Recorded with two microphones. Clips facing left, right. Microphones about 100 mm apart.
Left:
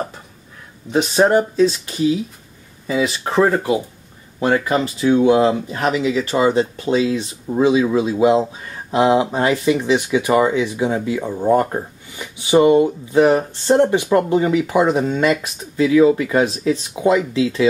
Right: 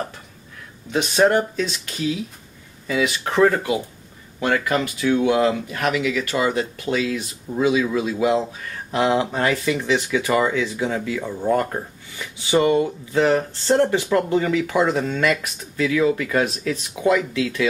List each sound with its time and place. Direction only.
0.9 s speech: 25° left (ahead or behind)